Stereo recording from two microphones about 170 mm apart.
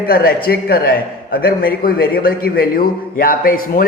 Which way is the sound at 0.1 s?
60° left (ahead or behind).